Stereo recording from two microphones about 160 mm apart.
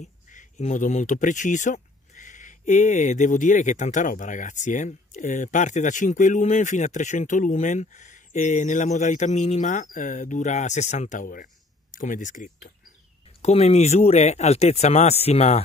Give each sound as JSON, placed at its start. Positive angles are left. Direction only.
{"t": 0.0, "sound": "speech", "side_deg": 50}
{"t": 13.4, "sound": "speech", "side_deg": 40}